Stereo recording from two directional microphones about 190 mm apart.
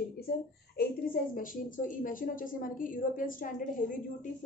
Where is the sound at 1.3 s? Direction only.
45° left (ahead or behind).